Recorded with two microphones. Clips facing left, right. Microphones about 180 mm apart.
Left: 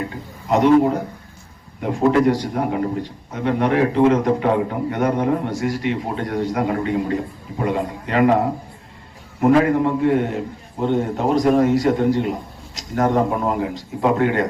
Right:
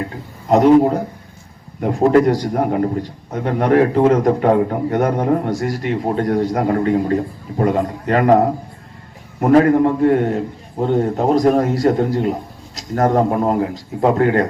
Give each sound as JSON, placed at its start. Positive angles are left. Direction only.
{"t": 0.4, "sound": "a man's voice", "side_deg": -40}
{"t": 9.5, "sound": "a man's voice", "side_deg": -45}